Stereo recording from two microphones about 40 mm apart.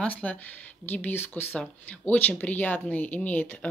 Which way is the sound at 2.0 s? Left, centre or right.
Left.